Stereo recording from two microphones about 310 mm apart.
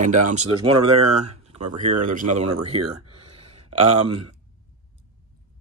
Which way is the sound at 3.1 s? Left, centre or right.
Right.